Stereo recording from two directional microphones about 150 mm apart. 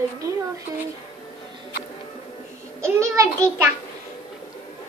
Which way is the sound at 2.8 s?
20° right (ahead or behind).